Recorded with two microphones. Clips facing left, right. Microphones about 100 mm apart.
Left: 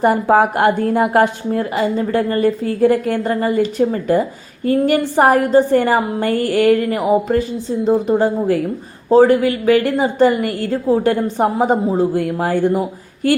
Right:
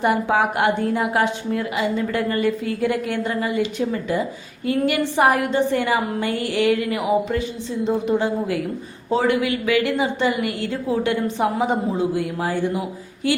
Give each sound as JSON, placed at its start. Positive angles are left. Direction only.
{"t": 0.0, "sound": "a woman's voice", "side_deg": 40}